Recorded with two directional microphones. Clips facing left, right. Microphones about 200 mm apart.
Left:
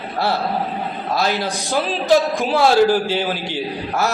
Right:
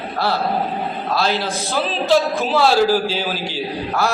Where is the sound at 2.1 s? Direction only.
15° left (ahead or behind).